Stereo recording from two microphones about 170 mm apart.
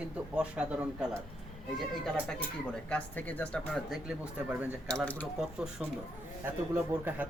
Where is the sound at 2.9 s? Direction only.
10° left (ahead or behind); by 4.7 s 5° right (ahead or behind).